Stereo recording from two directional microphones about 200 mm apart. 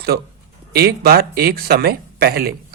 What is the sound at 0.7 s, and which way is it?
Speech, 50° right (ahead or behind).